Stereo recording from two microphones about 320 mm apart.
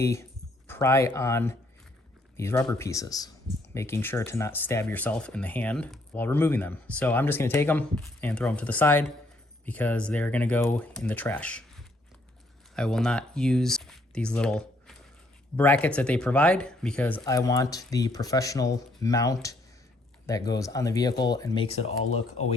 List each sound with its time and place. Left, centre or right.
0.0 s speech: centre
12.7 s speech: centre